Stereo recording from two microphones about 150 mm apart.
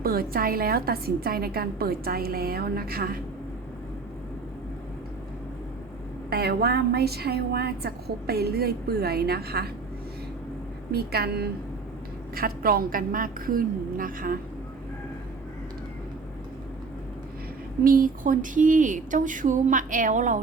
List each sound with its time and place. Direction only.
0.0 s a woman's voice: 80° right
6.3 s a woman's voice: 90° right
10.9 s a woman's voice: 90° right
12.3 s a woman's voice: 80° right
17.8 s speech: 65° right (ahead or behind)